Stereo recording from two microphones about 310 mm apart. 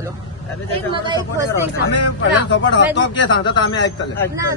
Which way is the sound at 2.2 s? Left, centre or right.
Left.